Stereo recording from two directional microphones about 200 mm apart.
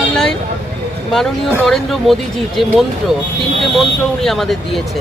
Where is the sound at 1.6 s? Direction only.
Centre (ahead or behind).